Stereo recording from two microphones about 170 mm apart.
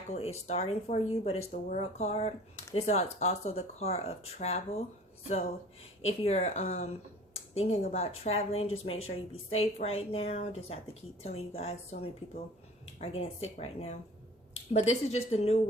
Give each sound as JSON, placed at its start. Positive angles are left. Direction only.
{"t": 0.1, "sound": "speech", "side_deg": 40}
{"t": 6.0, "sound": "speech", "side_deg": 40}